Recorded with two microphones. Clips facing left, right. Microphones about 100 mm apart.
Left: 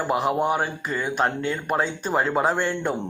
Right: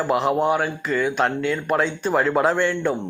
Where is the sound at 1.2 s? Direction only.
35° left (ahead or behind).